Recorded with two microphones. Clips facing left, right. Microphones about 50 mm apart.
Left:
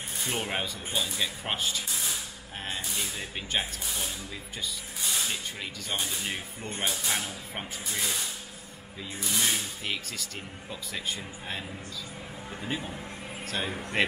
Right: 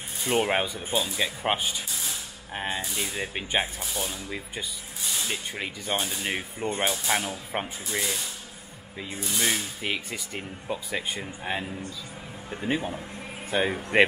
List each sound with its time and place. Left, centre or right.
0.3 s speech: right
3.8 s speech: centre
5.3 s speech: right
9.4 s speech: centre
12.6 s speech: right